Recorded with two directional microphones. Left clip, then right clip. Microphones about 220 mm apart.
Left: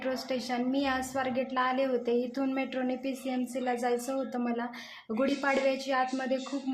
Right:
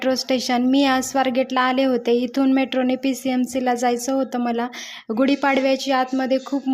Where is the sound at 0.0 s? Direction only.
40° right (ahead or behind).